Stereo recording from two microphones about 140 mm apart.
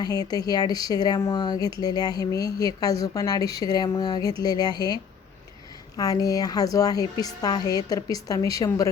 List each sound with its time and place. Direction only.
0.0 s speech: 25° left (ahead or behind)
6.0 s speech: 25° left (ahead or behind)